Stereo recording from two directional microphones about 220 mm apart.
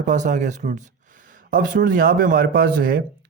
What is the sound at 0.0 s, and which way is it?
Speech, 35° right (ahead or behind).